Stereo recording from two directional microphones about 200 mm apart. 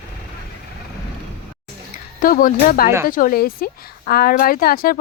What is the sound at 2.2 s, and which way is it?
Speech, 45° left (ahead or behind).